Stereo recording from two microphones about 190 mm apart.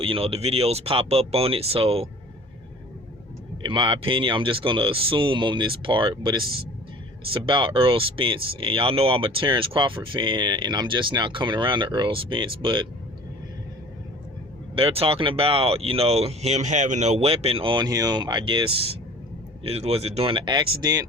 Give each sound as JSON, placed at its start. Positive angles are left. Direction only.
{"t": 0.0, "sound": "speech", "side_deg": -30}
{"t": 3.6, "sound": "speech", "side_deg": -25}
{"t": 14.8, "sound": "speech", "side_deg": -30}
{"t": 19.6, "sound": "speech", "side_deg": -30}